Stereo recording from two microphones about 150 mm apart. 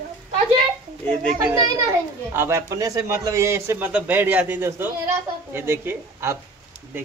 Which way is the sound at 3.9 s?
10° right (ahead or behind).